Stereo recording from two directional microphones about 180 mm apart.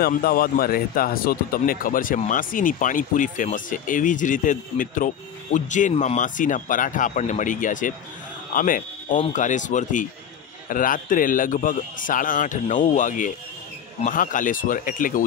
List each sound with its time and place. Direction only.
0.0 s speech: 55° left (ahead or behind)